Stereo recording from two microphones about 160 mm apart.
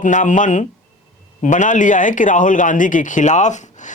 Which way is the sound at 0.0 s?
55° left (ahead or behind).